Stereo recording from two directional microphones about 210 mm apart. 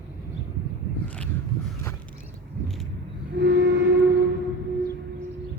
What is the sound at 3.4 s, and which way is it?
Train, 60° right (ahead or behind).